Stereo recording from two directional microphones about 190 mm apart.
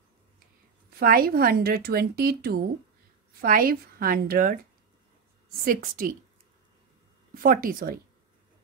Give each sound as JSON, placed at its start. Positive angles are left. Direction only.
{"t": 0.8, "sound": "a woman's voice", "side_deg": -50}
{"t": 5.7, "sound": "a woman's voice", "side_deg": -45}
{"t": 7.3, "sound": "a woman's voice", "side_deg": -50}